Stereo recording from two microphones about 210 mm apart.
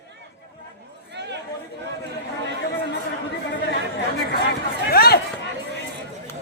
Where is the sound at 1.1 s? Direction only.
55° right (ahead or behind).